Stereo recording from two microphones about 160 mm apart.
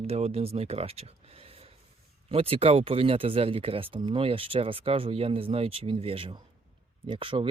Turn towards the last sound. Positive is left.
turn(degrees=-35)  # may be behind; listen again after turning